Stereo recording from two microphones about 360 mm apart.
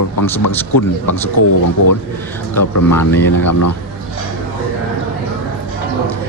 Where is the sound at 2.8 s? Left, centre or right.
Centre.